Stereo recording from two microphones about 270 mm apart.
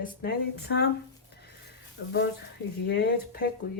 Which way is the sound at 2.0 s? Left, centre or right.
Left.